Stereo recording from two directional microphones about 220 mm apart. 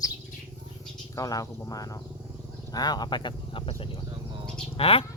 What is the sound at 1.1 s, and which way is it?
Speech, 15° left (ahead or behind).